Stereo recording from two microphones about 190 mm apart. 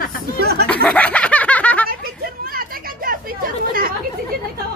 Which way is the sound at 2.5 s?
50° right (ahead or behind).